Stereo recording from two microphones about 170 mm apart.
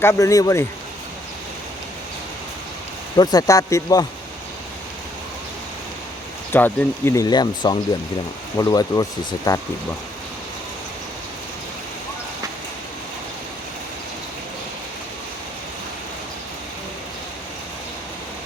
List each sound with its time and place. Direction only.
0.0 s speech: 15° left (ahead or behind)
3.2 s speech: 20° left (ahead or behind)
6.5 s speech: 10° left (ahead or behind)